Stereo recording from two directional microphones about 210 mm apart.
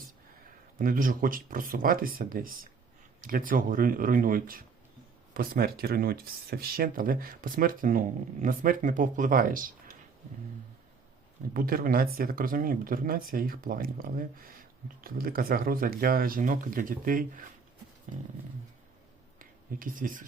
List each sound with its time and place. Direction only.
0.8 s speech: 40° right (ahead or behind)
11.5 s speech: 45° right (ahead or behind)
19.4 s speech: 40° right (ahead or behind)